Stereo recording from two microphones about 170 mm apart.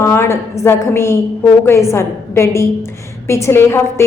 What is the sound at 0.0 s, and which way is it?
A woman's voice, 15° left (ahead or behind).